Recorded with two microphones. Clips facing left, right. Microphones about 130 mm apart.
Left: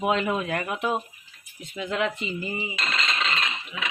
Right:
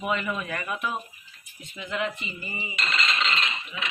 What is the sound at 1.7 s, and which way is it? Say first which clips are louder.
Speech: left 3 dB; 85° left.